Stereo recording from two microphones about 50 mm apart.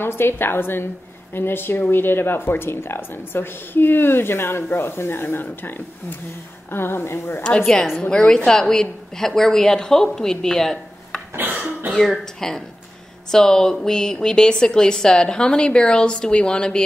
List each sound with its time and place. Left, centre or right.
0.0 s speech: left
7.4 s a woman's voice: left